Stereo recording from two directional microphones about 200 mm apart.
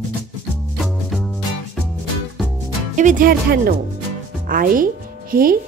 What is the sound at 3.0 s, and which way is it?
Speech, 40° right (ahead or behind).